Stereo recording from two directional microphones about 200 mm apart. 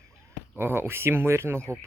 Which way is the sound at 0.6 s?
10° right (ahead or behind).